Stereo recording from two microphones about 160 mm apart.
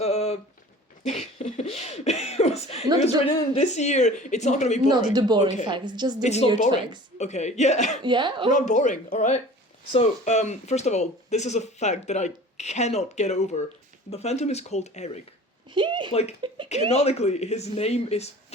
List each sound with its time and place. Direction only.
0.0 s a sound: 40° left (ahead or behind)
1.0 s speech: 40° left (ahead or behind)
5.1 s a woman's voice: 25° right (ahead or behind)
6.2 s speech: 45° left (ahead or behind)
8.0 s a woman's voice: 30° right (ahead or behind)
8.4 s speech: 50° left (ahead or behind)
15.7 s a woman's voice: 30° right (ahead or behind)
16.9 s speech: 40° left (ahead or behind)